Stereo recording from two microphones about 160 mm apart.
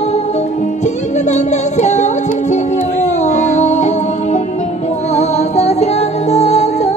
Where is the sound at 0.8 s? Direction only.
45° left (ahead or behind).